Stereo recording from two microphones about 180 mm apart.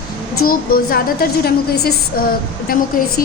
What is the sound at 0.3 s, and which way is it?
A woman's voice, 55° left (ahead or behind).